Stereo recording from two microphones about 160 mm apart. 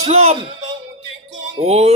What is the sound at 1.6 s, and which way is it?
Speech, 40° right (ahead or behind).